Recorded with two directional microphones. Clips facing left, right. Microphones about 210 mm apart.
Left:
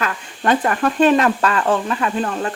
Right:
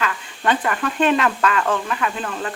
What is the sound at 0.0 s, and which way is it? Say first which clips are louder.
Speech: left 1 dB; 45° left (ahead or behind).